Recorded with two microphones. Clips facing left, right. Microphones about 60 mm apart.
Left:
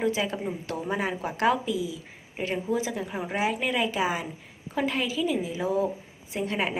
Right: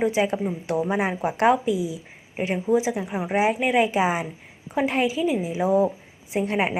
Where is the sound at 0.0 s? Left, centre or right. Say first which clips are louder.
Right 5 dB; right.